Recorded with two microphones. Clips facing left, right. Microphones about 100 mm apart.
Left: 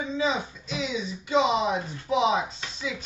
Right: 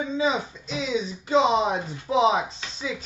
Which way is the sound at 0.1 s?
30° right (ahead or behind).